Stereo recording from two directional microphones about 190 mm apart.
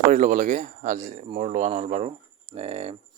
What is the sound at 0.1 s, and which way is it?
Speech, 40° right (ahead or behind).